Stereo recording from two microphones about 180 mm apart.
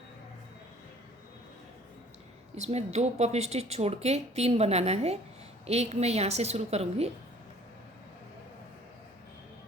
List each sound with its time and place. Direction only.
2.6 s speech: 35° right (ahead or behind)